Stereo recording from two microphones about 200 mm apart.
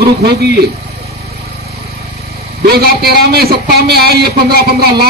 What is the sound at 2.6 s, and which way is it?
Speech, 50° right (ahead or behind).